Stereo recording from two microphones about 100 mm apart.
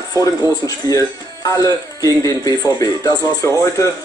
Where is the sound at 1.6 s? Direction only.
35° left (ahead or behind).